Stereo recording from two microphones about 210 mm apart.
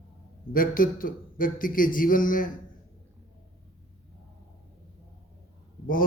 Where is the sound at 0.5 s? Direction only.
40° left (ahead or behind).